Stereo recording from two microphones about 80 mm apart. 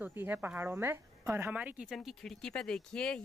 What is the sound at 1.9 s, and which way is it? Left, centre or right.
Speech, centre.